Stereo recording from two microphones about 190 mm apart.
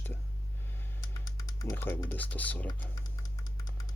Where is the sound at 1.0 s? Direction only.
20° left (ahead or behind).